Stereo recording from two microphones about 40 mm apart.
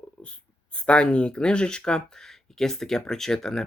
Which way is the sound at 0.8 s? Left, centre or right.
Left.